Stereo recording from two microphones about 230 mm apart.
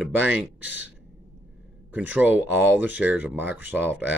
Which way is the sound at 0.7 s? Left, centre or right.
Left.